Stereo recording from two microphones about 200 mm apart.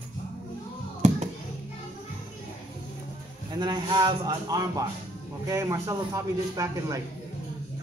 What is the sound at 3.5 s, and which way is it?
A man's voice, 20° right (ahead or behind).